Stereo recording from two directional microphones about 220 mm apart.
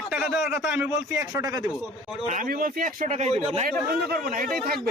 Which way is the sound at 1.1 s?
15° right (ahead or behind).